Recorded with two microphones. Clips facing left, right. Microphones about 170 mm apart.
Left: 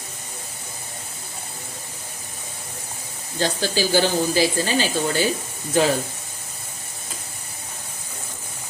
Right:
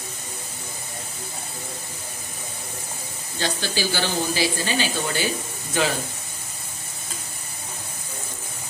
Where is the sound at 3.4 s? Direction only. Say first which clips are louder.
Left 4 dB; 45° left (ahead or behind).